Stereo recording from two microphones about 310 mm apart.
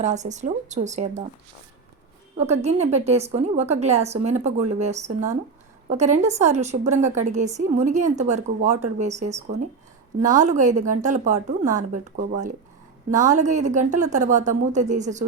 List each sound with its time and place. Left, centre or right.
0.0 s a woman's voice: right
2.4 s a woman's voice: right